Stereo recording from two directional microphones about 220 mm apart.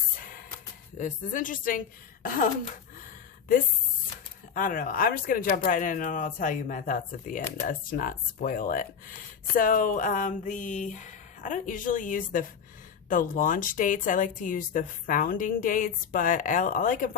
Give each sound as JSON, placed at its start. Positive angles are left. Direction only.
{"t": 0.2, "sound": "music", "side_deg": 40}
{"t": 0.9, "sound": "speech", "side_deg": 35}
{"t": 4.5, "sound": "speech", "side_deg": 40}